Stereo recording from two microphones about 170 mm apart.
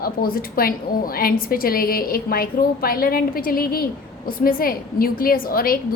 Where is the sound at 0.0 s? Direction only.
60° left (ahead or behind).